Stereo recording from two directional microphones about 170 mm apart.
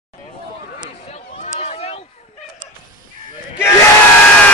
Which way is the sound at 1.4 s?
40° left (ahead or behind).